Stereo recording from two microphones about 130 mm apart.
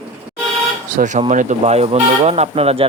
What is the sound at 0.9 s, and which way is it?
Speech, 75° right (ahead or behind).